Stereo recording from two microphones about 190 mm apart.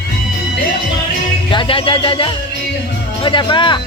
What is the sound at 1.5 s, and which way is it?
A man's voice, 25° left (ahead or behind).